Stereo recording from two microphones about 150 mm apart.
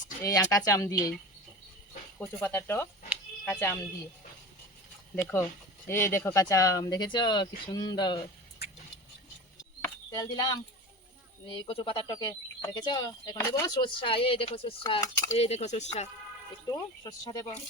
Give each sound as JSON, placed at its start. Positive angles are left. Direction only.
{"t": 0.2, "sound": "speech", "side_deg": 25}
{"t": 2.1, "sound": "speech", "side_deg": 10}
{"t": 5.1, "sound": "speech", "side_deg": 15}
{"t": 9.8, "sound": "a sound", "side_deg": 20}
{"t": 11.4, "sound": "speech", "side_deg": 30}
{"t": 16.6, "sound": "speech", "side_deg": 25}